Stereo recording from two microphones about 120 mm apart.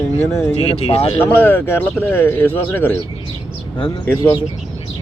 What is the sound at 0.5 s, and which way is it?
Speech, 55° left (ahead or behind).